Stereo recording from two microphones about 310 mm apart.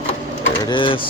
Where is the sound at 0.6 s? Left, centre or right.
Centre.